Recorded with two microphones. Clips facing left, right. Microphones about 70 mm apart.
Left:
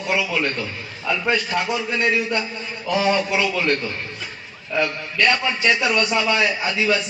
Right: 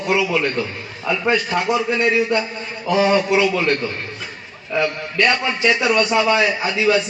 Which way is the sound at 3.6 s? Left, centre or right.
Centre.